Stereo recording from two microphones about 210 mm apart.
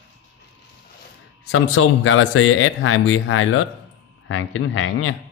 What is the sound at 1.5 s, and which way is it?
Speech, 75° left (ahead or behind).